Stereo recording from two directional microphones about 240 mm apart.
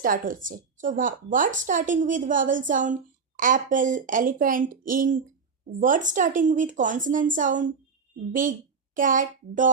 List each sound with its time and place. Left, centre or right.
0.0 s a woman's voice: right